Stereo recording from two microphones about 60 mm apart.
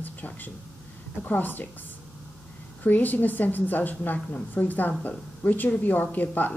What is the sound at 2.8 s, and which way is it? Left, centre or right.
A woman's voice, left.